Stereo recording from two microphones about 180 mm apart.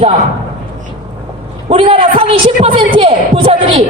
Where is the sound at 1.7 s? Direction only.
30° right (ahead or behind).